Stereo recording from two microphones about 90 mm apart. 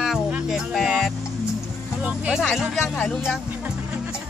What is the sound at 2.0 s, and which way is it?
Music, 10° right (ahead or behind).